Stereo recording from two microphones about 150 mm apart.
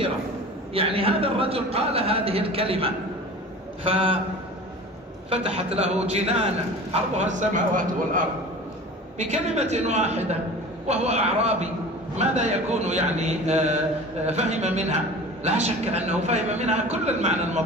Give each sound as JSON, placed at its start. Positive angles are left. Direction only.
{"t": 0.7, "sound": "a man's voice", "side_deg": -40}
{"t": 5.3, "sound": "a man's voice", "side_deg": -40}
{"t": 9.2, "sound": "a man's voice", "side_deg": -50}